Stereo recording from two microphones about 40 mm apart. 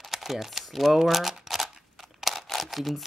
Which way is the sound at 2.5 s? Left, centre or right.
Centre.